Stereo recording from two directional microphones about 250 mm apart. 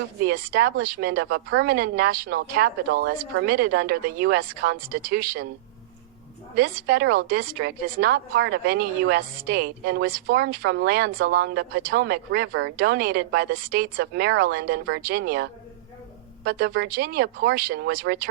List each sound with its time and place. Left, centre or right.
0.2 s a woman's voice: right
6.6 s a woman's voice: right